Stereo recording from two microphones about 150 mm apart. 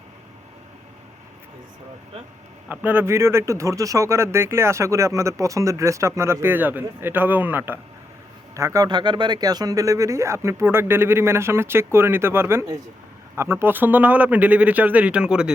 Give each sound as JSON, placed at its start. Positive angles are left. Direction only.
{"t": 2.6, "sound": "speech", "side_deg": -15}